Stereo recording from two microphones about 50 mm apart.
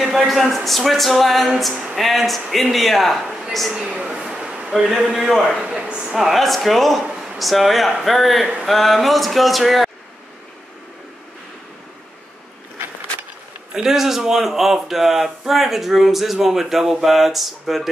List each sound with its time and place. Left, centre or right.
0.2 s a man's voice: centre
3.8 s a sound: centre
4.9 s speech: centre
5.6 s speech: centre
6.1 s speech: centre
13.7 s speech: centre